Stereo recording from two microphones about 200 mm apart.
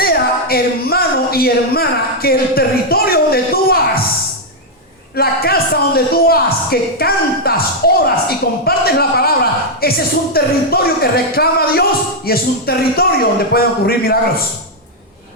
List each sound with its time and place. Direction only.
0.0 s speech: 50° left (ahead or behind)
5.1 s speech: 50° left (ahead or behind)